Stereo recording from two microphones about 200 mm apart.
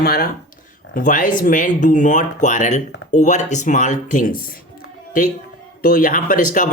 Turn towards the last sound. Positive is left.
turn(degrees=40)  # may be behind; listen again after turning